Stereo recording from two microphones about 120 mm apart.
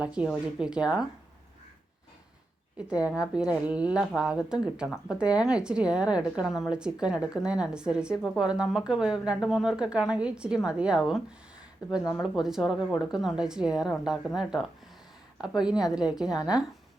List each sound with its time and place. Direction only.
0.0 s a woman's voice: 10° right (ahead or behind)
2.7 s a woman's voice: 10° right (ahead or behind)
12.2 s a woman's voice: 5° right (ahead or behind)